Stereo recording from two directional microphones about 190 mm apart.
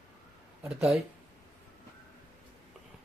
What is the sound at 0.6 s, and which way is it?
Speech, 5° right (ahead or behind).